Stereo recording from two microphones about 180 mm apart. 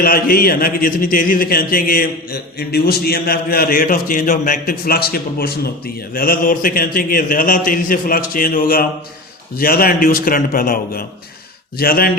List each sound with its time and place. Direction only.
0.0 s a man's voice: 55° left (ahead or behind)